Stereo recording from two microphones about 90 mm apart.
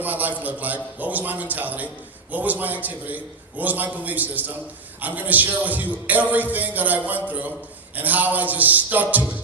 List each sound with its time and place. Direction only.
0.0 s a man's voice: 20° right (ahead or behind)